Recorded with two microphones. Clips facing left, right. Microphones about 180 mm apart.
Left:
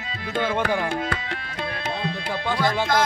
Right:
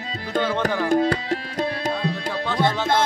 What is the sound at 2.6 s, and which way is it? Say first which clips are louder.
Music: right 3 dB; 30° right (ahead or behind).